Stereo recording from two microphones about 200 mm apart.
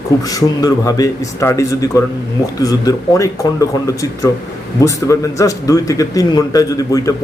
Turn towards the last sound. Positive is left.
turn(degrees=15)  # may be behind; listen again after turning